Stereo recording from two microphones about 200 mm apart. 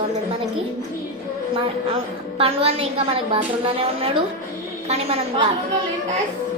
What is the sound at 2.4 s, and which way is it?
A woman's voice, 30° right (ahead or behind).